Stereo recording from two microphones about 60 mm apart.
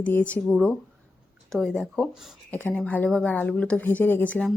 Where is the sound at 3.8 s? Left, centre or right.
Left.